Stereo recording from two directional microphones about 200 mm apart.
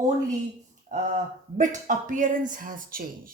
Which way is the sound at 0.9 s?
40° right (ahead or behind).